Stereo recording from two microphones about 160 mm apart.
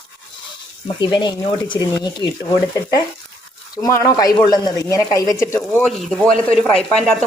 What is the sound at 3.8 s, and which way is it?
Speech, 20° left (ahead or behind).